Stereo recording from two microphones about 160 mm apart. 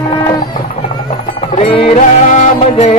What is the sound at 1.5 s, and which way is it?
Music, 35° left (ahead or behind).